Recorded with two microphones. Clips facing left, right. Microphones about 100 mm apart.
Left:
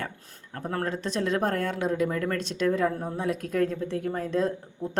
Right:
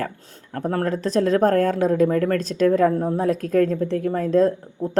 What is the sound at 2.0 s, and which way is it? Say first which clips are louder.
Speech: right 8 dB; 50° right (ahead or behind).